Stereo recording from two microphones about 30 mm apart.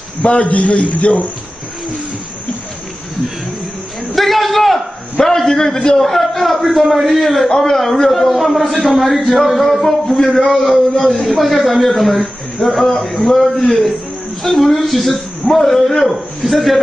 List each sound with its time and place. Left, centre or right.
0.2 s a man's voice: left
4.1 s a sound: centre
5.2 s a man's voice: centre
10.6 s a man's voice: centre
13.1 s a man's voice: left
13.7 s a man's voice: centre